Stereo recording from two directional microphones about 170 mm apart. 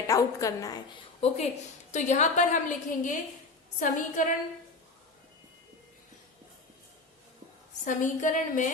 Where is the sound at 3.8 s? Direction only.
50° left (ahead or behind).